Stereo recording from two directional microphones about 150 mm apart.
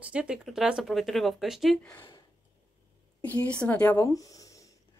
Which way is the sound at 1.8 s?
15° left (ahead or behind).